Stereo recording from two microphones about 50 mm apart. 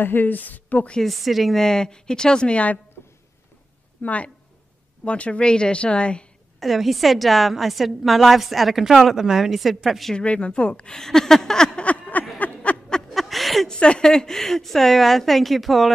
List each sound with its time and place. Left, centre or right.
0.0 s a woman's voice: left
1.0 s a woman's voice: centre
1.6 s a woman's voice: centre
4.0 s a woman's voice: left
6.6 s a woman's voice: centre
10.1 s a woman's voice: left
11.8 s a sound: left
13.1 s a sound: centre
13.7 s a woman's voice: centre